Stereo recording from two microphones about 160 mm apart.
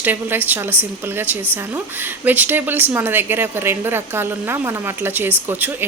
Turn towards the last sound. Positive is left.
turn(degrees=-10)  # may be behind; listen again after turning